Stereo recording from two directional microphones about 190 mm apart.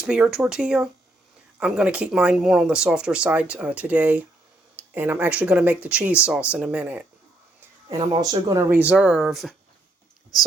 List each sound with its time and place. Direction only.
0.0 s speech: 5° right (ahead or behind)
7.9 s speech: 20° right (ahead or behind)
8.8 s speech: 5° right (ahead or behind)